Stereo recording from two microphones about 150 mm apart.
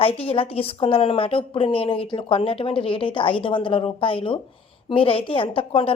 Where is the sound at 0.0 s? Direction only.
40° left (ahead or behind).